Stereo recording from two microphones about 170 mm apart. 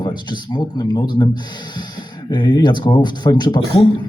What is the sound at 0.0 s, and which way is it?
Speech, 25° left (ahead or behind).